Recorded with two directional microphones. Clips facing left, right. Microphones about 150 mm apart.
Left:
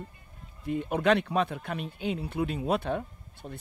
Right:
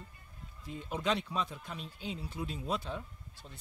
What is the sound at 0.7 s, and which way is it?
Speech, 60° left (ahead or behind).